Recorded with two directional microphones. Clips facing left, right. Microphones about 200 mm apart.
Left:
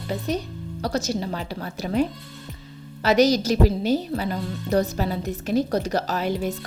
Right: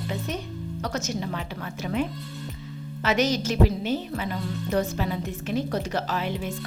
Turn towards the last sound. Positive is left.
turn(degrees=40)  # may be behind; listen again after turning